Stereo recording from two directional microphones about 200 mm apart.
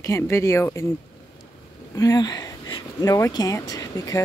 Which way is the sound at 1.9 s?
20° left (ahead or behind).